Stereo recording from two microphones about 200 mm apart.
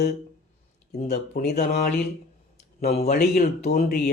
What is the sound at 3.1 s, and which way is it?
Speech, 50° left (ahead or behind).